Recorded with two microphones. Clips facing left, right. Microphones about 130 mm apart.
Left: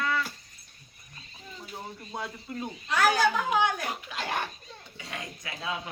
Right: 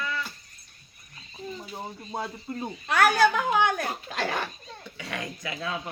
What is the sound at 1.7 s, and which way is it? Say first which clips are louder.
Speech: right 2 dB; 35° right (ahead or behind).